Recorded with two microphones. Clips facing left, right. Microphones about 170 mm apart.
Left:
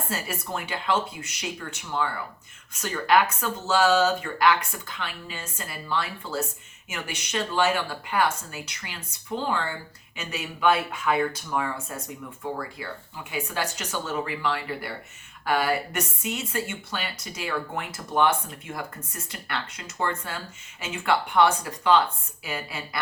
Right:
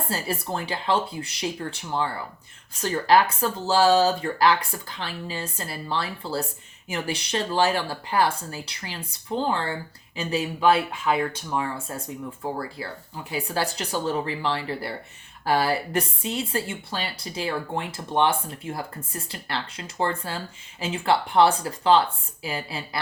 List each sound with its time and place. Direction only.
0.1 s speech: 30° right (ahead or behind)